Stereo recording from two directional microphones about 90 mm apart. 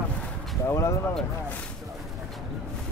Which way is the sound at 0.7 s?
35° left (ahead or behind).